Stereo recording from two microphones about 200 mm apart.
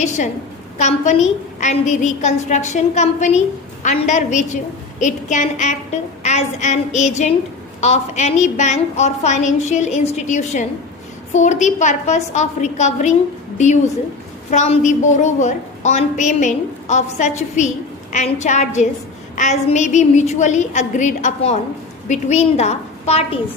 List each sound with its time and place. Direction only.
0.8 s a woman's voice: 35° left (ahead or behind)
14.5 s a woman's voice: 35° left (ahead or behind)